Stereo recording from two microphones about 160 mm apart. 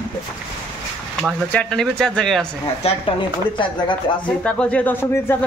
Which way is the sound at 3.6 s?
30° left (ahead or behind).